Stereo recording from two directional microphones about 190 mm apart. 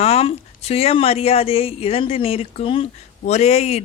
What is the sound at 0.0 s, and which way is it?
Speech, 30° left (ahead or behind).